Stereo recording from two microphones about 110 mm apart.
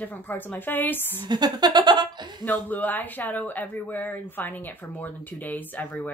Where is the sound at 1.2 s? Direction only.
40° right (ahead or behind).